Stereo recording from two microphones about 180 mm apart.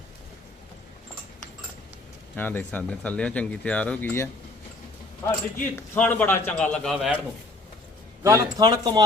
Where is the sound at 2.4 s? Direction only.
10° left (ahead or behind).